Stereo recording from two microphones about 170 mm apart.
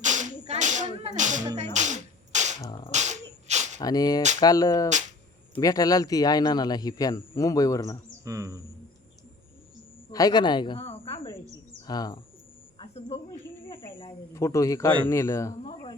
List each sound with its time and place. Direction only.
0.0 s whip: 45° right (ahead or behind)
2.6 s beatboxing: 25° left (ahead or behind)
2.9 s a sound: 45° right (ahead or behind)
3.8 s a man's voice: 20° left (ahead or behind)
8.2 s speech: 20° right (ahead or behind)
10.1 s a woman's voice: 20° left (ahead or behind)
12.8 s a sound: 35° left (ahead or behind)
14.3 s speech: 15° left (ahead or behind)